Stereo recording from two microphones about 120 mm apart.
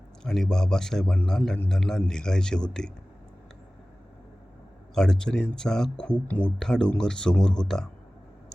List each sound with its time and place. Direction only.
0.2 s a man's voice: 5° left (ahead or behind)
4.9 s speech: 5° left (ahead or behind)